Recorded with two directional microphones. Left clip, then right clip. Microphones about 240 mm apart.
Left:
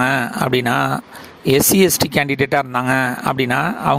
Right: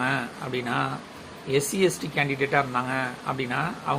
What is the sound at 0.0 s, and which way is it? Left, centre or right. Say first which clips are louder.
A man's voice: left 10 dB; left.